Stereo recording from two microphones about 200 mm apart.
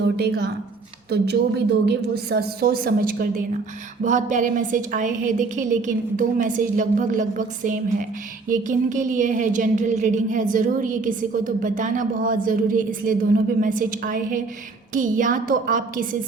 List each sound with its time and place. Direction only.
0.2 s a woman's voice: 50° right (ahead or behind)
4.0 s a sound: 40° right (ahead or behind)
14.9 s a woman's voice: 40° right (ahead or behind)